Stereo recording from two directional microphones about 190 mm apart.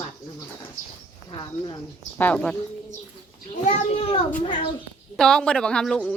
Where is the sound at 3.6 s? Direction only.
35° left (ahead or behind).